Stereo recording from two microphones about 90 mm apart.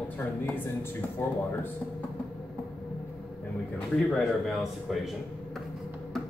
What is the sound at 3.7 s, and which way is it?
Speech, centre (ahead or behind).